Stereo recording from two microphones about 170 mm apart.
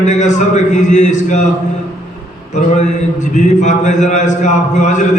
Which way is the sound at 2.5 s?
45° left (ahead or behind).